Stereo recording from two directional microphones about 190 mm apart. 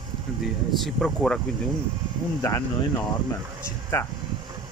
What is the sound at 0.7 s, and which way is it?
Speech, centre (ahead or behind).